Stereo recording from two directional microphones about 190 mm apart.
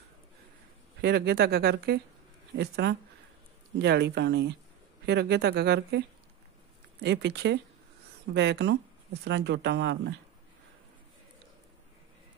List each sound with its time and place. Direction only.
1.0 s speech: 60° right (ahead or behind)
7.0 s speech: 65° right (ahead or behind)